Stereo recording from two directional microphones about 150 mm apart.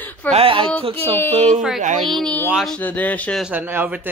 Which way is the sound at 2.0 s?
Centre (ahead or behind).